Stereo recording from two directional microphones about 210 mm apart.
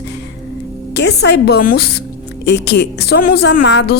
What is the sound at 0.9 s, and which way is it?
Speech, 55° left (ahead or behind).